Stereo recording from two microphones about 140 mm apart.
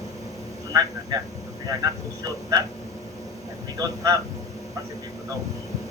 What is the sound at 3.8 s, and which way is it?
Speech, 25° right (ahead or behind).